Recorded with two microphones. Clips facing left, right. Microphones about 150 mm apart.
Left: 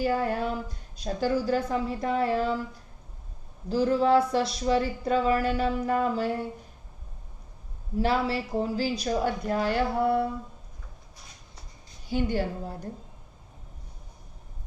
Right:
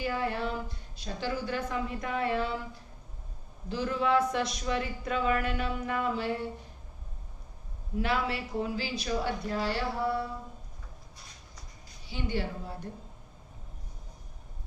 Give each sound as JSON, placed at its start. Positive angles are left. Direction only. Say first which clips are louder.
{"t": 0.0, "sound": "a sound", "louder": "left 5 dB", "side_deg": 40}
{"t": 0.9, "sound": "speech", "louder": "left 7 dB", "side_deg": 45}
{"t": 3.7, "sound": "speech", "louder": "left 6 dB", "side_deg": 35}
{"t": 7.9, "sound": "speech", "louder": "left 5 dB", "side_deg": 35}
{"t": 12.0, "sound": "a woman's voice", "louder": "left 6 dB", "side_deg": 45}